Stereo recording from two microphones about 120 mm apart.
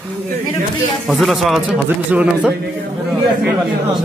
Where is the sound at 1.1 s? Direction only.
Centre (ahead or behind).